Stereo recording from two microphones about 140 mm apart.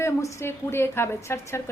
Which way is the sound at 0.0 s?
20° left (ahead or behind).